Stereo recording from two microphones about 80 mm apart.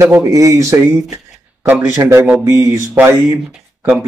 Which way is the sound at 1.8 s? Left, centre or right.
Right.